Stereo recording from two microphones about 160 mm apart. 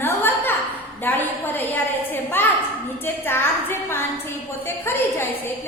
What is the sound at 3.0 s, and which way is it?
A woman's voice, 15° left (ahead or behind).